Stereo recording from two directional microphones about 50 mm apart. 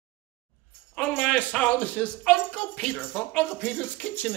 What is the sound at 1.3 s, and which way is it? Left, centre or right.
Speech, left.